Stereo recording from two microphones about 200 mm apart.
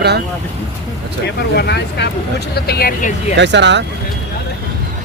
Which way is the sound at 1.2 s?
55° left (ahead or behind).